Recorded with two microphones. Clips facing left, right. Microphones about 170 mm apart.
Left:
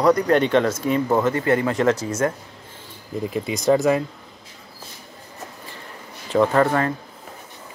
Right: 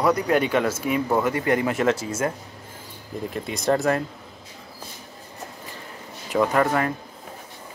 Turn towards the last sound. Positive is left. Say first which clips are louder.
# left 3 dB
turn(degrees=-15)  # may be behind; listen again after turning